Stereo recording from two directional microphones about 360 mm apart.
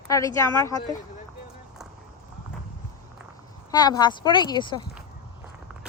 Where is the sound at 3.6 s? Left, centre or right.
Centre.